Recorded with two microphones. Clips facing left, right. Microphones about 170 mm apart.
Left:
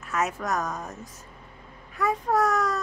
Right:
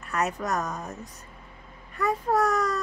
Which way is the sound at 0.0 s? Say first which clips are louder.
Even; centre (ahead or behind).